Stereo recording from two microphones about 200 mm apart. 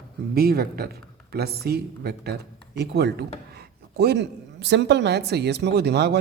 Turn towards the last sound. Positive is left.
turn(degrees=-55)  # may be behind; listen again after turning